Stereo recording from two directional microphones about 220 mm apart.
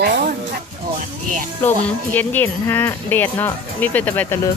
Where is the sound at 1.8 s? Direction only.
10° left (ahead or behind).